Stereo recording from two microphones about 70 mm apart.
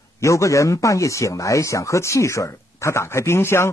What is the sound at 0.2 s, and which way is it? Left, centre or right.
Speech, left.